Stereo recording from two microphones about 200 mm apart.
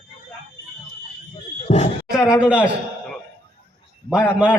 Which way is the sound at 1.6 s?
35° left (ahead or behind).